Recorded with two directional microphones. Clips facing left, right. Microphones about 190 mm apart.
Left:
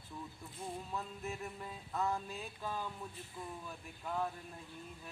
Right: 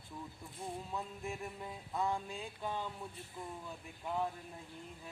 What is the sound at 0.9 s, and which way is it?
Music, 15° right (ahead or behind).